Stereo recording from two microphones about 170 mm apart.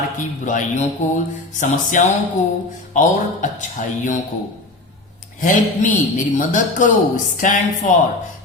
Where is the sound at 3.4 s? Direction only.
45° left (ahead or behind).